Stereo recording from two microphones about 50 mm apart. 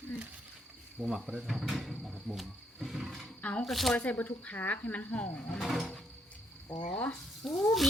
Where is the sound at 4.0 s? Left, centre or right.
Left.